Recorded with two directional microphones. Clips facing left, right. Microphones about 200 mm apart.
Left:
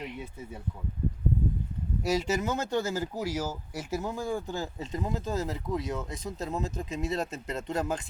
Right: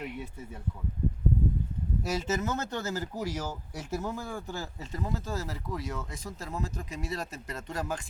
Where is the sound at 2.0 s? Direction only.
15° left (ahead or behind).